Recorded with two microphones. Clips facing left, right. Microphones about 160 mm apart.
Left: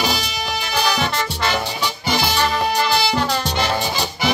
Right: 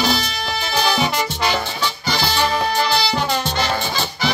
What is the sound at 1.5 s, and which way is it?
Music, 15° left (ahead or behind).